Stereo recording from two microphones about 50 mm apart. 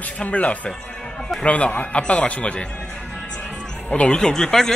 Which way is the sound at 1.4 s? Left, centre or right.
Left.